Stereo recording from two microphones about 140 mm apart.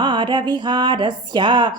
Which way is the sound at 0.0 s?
35° right (ahead or behind).